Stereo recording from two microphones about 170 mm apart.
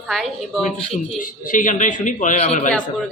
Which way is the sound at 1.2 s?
50° left (ahead or behind).